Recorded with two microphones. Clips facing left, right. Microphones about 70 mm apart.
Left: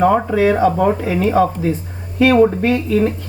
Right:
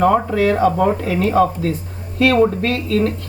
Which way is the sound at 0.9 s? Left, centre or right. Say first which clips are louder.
Left 1 dB; left.